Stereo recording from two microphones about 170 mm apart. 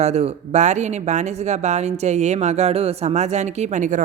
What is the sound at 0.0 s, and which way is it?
Speech, 40° right (ahead or behind).